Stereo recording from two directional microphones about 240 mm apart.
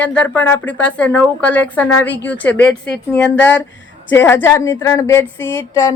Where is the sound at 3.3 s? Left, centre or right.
Left.